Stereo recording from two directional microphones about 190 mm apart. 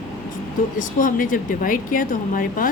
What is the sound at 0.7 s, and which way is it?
A woman's voice, 45° left (ahead or behind).